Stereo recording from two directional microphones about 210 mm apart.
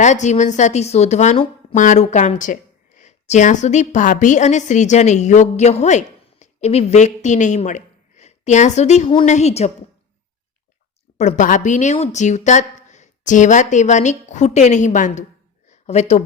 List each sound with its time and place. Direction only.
0.0 s speech: 35° left (ahead or behind)
11.2 s speech: 35° left (ahead or behind)
15.7 s a sound: 35° left (ahead or behind)